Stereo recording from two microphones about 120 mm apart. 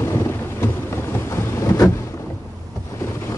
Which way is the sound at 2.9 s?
20° left (ahead or behind).